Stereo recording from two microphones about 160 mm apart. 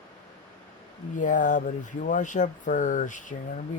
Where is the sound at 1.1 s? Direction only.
55° left (ahead or behind).